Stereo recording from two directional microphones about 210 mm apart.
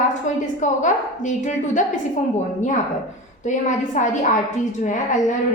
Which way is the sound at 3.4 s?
35° left (ahead or behind).